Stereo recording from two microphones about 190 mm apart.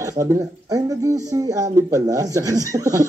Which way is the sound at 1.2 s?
20° right (ahead or behind).